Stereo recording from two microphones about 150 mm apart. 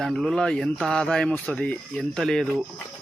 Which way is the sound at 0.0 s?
5° left (ahead or behind).